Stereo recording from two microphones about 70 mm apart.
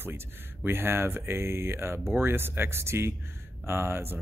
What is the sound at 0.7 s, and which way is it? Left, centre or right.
Speech, right.